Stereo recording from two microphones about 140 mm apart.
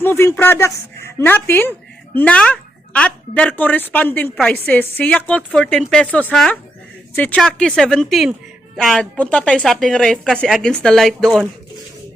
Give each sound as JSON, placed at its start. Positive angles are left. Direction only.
{"t": 0.0, "sound": "a woman's voice", "side_deg": 20}